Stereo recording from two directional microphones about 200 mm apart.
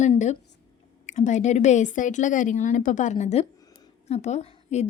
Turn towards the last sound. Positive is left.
turn(degrees=35)  # may be behind; listen again after turning